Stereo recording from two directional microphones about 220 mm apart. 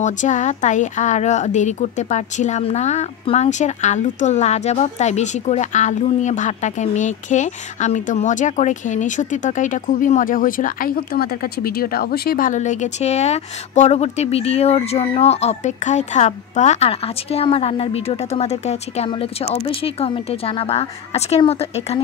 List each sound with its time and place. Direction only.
0.0 s speech: 35° left (ahead or behind)